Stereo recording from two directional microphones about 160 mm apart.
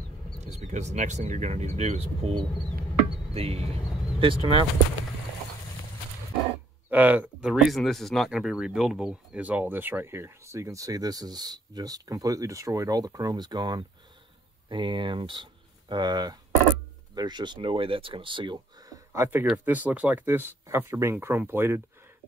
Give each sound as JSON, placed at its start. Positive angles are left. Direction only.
{"t": 0.4, "sound": "speech", "side_deg": -45}
{"t": 6.9, "sound": "speech", "side_deg": -10}